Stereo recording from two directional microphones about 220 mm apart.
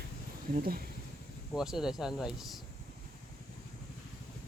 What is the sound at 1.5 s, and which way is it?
Speech, centre (ahead or behind).